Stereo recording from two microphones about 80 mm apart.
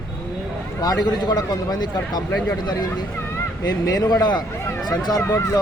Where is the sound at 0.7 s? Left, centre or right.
Left.